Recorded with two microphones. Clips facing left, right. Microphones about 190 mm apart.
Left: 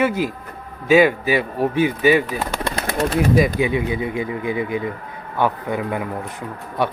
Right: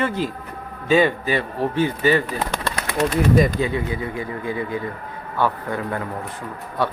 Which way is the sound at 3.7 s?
15° left (ahead or behind).